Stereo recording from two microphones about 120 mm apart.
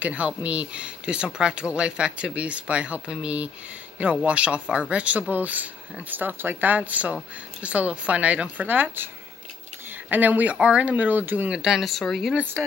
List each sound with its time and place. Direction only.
0.0 s speech: 10° right (ahead or behind)
12.4 s speech: 15° right (ahead or behind)